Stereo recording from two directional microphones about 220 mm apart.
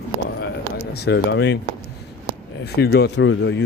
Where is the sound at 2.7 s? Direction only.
50° left (ahead or behind).